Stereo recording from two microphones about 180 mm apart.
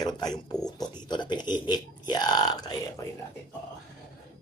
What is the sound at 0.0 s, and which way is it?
Speech, 20° left (ahead or behind).